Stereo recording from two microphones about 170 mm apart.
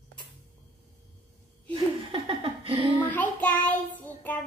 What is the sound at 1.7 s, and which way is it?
Speech, 35° right (ahead or behind).